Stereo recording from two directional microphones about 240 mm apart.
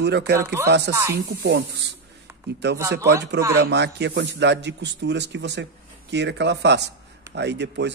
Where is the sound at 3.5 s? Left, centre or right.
Right.